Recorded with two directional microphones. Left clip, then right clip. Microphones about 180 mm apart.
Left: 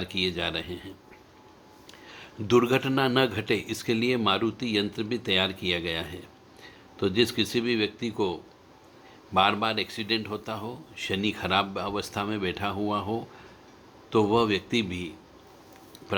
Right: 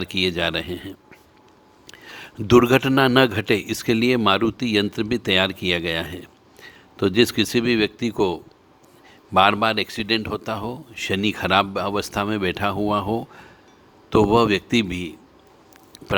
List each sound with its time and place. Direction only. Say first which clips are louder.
0.0 s a man's voice: right 7 dB; 55° right (ahead or behind)